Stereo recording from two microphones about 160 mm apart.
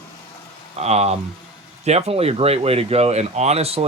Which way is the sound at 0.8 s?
40° right (ahead or behind).